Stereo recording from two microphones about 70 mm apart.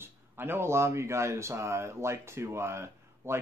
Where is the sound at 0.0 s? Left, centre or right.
Right.